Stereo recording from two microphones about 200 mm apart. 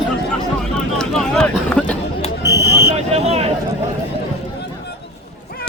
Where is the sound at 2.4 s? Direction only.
15° right (ahead or behind).